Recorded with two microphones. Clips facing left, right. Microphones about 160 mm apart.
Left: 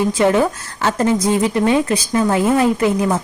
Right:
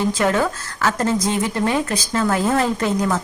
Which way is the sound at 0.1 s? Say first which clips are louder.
Left 4 dB; 15° left (ahead or behind).